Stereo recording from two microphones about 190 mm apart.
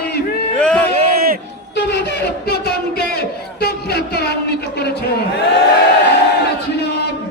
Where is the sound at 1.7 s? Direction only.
60° left (ahead or behind).